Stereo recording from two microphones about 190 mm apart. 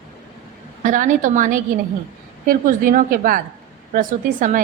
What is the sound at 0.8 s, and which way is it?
A woman's voice, 45° right (ahead or behind).